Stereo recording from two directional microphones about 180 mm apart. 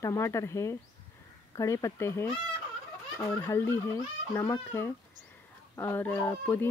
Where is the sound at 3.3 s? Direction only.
15° left (ahead or behind).